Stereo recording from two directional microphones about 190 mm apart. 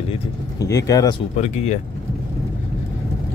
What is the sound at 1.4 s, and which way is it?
Speech, 35° left (ahead or behind).